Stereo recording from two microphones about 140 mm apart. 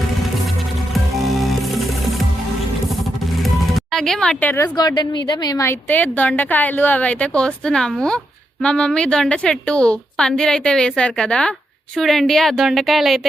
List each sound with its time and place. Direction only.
1.2 s music: centre (ahead or behind)
3.4 s music: centre (ahead or behind)
4.8 s a woman's voice: 30° left (ahead or behind)
5.6 s a woman's voice: 10° left (ahead or behind)